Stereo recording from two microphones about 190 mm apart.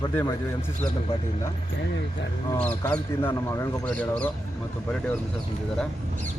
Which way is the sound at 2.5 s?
10° left (ahead or behind).